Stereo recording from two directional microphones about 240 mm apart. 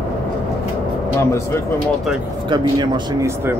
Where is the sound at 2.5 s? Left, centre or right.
Centre.